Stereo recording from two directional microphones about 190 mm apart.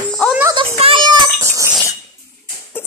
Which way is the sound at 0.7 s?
30° right (ahead or behind).